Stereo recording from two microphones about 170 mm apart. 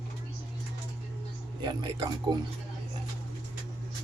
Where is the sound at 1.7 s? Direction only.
25° right (ahead or behind).